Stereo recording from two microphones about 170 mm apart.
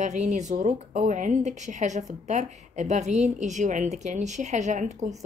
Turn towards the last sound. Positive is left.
turn(degrees=-45)  # may be behind; listen again after turning